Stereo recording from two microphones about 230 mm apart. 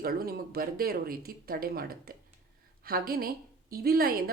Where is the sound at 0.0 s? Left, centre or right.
Right.